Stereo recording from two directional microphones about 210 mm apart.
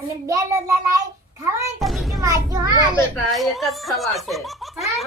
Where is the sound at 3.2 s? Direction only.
Centre (ahead or behind).